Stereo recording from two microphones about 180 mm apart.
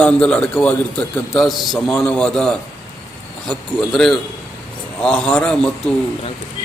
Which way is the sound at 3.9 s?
Centre (ahead or behind).